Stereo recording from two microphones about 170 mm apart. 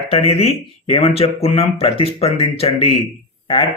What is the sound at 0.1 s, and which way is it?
Speech, 35° left (ahead or behind).